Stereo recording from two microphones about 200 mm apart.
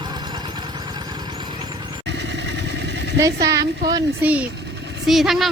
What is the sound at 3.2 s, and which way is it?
Speech, 15° right (ahead or behind).